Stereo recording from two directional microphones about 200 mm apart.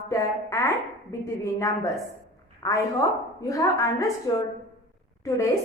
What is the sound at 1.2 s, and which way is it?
A woman's voice, 15° left (ahead or behind).